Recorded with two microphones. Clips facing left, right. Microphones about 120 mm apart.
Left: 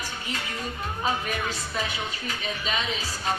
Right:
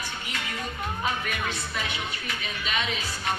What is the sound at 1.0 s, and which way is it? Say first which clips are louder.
Speech: left 3 dB; 35° left (ahead or behind).